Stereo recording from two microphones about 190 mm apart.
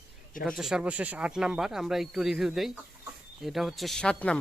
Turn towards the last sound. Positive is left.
turn(degrees=5)  # may be behind; listen again after turning